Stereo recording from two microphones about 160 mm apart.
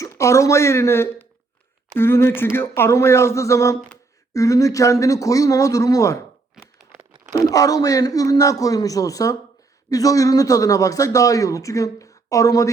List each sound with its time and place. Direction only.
0.0 s speech: 20° left (ahead or behind)
7.3 s speech: 20° left (ahead or behind)